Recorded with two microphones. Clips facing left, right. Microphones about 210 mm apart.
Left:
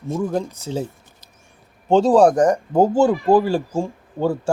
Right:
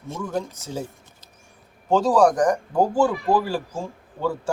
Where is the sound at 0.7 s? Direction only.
25° left (ahead or behind).